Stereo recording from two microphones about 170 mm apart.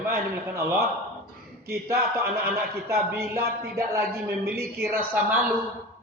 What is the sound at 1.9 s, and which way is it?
A woman's voice, 15° right (ahead or behind).